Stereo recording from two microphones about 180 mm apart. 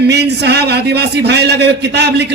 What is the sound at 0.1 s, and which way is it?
A man's voice, 70° right (ahead or behind).